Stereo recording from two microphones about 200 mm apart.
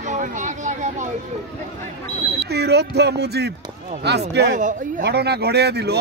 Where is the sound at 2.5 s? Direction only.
55° right (ahead or behind).